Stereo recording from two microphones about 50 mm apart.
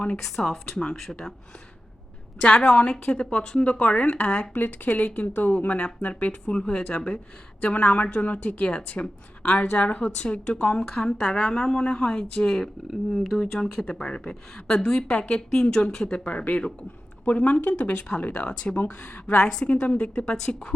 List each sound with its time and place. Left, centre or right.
0.2 s speech: centre
2.4 s a woman's voice: left
19.4 s speech: centre
19.6 s speech: left